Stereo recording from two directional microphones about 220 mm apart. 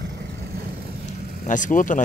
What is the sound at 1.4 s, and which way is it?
Speech, 35° left (ahead or behind).